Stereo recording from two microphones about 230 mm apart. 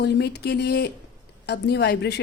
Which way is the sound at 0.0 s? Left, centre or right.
Left.